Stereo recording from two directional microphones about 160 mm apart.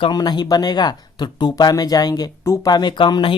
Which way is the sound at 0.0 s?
25° left (ahead or behind).